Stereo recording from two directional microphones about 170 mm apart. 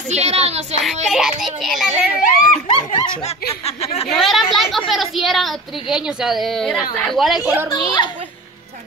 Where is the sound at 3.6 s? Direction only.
35° left (ahead or behind).